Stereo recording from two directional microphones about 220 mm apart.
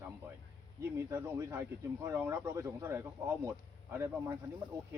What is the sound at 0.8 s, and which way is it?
Speech, 10° right (ahead or behind).